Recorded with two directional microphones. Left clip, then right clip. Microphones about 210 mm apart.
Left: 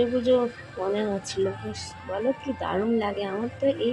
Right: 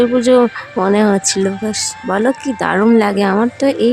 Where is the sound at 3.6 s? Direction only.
40° right (ahead or behind).